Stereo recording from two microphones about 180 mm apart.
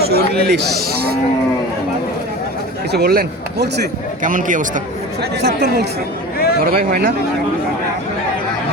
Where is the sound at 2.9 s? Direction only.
60° right (ahead or behind).